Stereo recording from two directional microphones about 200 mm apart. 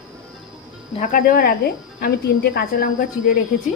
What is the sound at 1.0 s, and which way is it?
Speech, 45° left (ahead or behind).